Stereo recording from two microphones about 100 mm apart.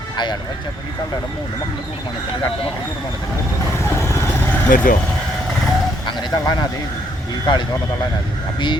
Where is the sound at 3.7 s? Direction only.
30° left (ahead or behind).